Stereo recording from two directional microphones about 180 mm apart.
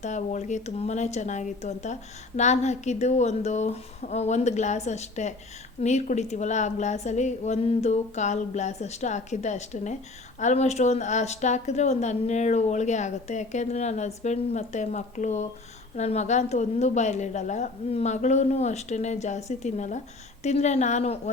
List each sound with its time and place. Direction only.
0.0 s speech: 40° left (ahead or behind)